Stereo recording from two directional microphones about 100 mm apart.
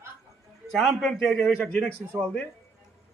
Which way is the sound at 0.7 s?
Centre (ahead or behind).